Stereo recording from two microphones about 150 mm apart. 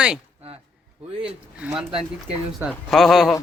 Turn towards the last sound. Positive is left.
turn(degrees=0)  # may be behind; listen again after turning